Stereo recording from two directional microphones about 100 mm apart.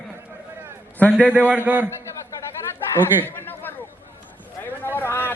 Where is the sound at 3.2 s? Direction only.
20° left (ahead or behind).